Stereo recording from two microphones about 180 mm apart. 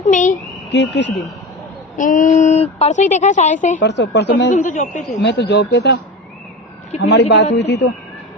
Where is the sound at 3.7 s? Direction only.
75° left (ahead or behind).